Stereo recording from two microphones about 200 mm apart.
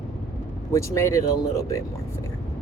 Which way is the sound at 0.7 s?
15° left (ahead or behind).